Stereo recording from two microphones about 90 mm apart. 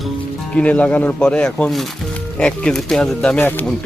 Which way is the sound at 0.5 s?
15° left (ahead or behind).